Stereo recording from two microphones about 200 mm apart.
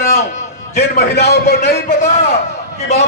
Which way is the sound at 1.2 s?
55° left (ahead or behind).